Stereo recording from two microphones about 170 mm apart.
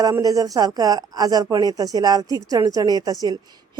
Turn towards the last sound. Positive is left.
turn(degrees=-20)  # may be behind; listen again after turning